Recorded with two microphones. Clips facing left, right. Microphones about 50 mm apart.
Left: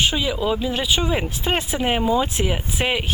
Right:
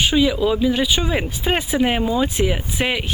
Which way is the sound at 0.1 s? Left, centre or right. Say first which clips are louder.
Right 6 dB; centre.